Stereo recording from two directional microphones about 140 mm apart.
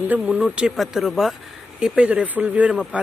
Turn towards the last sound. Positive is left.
turn(degrees=-10)  # may be behind; listen again after turning